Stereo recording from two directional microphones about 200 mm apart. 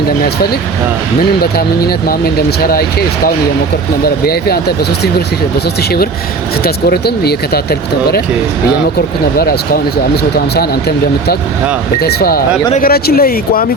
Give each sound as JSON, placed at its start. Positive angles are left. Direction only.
{"t": 1.4, "sound": "speech", "side_deg": 50}
{"t": 6.6, "sound": "speech", "side_deg": 50}
{"t": 9.4, "sound": "speech", "side_deg": 50}